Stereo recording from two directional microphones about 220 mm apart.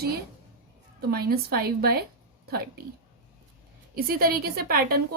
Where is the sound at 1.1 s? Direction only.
45° right (ahead or behind).